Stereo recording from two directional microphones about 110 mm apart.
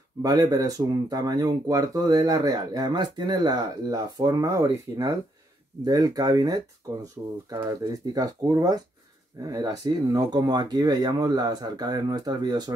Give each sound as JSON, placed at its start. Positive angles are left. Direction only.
{"t": 0.2, "sound": "speech", "side_deg": -35}